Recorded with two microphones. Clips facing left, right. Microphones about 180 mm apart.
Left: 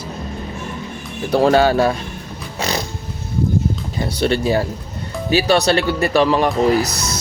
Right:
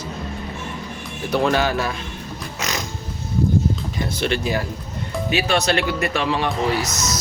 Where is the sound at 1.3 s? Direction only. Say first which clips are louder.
Left 6 dB; 30° left (ahead or behind).